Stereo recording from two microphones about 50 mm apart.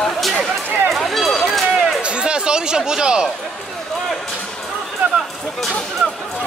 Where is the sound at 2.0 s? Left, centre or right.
Centre.